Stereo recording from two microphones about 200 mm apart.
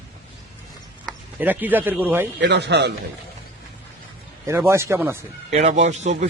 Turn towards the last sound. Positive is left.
turn(degrees=-35)  # may be behind; listen again after turning